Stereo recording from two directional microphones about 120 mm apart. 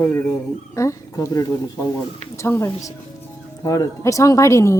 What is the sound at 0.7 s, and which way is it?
A woman's voice, 25° left (ahead or behind).